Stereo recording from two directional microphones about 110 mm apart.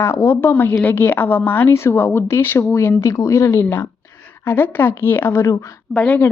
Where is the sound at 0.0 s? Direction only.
25° left (ahead or behind).